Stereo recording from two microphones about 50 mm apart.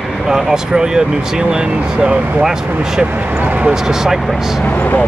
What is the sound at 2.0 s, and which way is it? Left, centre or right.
Speech, centre.